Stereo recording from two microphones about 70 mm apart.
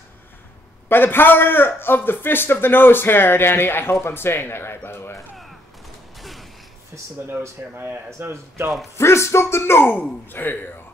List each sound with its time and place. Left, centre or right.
0.8 s a man's voice: left
5.3 s fusillade: centre
6.1 s a sound: centre
6.9 s speech: right
8.9 s a man's voice: left